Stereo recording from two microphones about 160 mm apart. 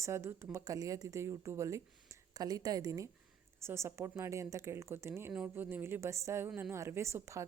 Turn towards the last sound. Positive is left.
turn(degrees=-20)  # may be behind; listen again after turning